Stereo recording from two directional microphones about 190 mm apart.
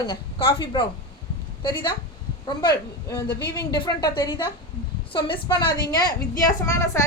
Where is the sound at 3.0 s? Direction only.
15° left (ahead or behind).